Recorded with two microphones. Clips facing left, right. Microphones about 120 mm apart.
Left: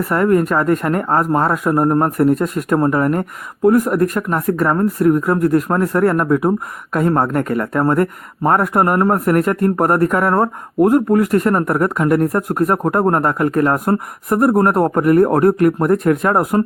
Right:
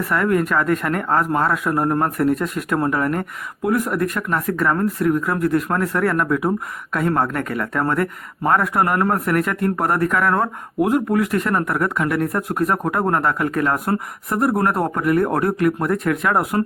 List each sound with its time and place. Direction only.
0.1 s speech: 40° left (ahead or behind)